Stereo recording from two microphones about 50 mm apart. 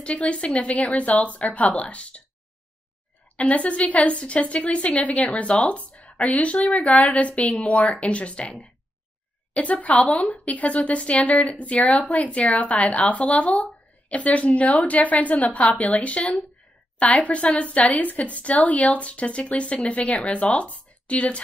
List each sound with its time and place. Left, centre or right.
0.0 s a woman's voice: left
3.3 s a woman's voice: left